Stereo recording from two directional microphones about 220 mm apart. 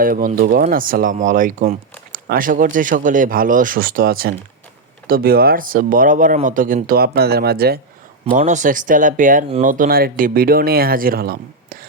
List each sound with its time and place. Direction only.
0.0 s speech: 40° right (ahead or behind)